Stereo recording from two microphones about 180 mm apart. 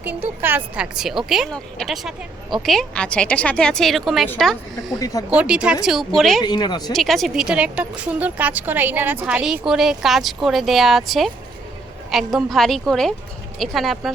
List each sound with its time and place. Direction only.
0.4 s speech: 10° right (ahead or behind)
4.9 s speech: 20° left (ahead or behind)
5.4 s speech: 5° right (ahead or behind)
6.4 s speech: 25° left (ahead or behind)
6.9 s speech: centre (ahead or behind)